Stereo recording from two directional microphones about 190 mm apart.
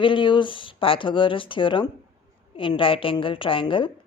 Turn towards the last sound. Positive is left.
turn(degrees=25)  # may be behind; listen again after turning